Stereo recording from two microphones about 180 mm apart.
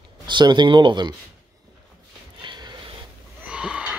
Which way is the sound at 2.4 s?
25° right (ahead or behind).